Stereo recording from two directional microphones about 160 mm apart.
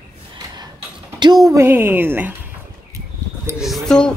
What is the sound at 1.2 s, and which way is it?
Speech, 25° right (ahead or behind).